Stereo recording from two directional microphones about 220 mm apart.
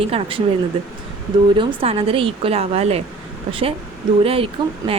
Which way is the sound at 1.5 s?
25° right (ahead or behind).